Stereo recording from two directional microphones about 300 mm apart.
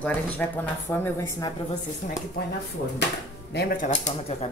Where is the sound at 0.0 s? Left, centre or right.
Centre.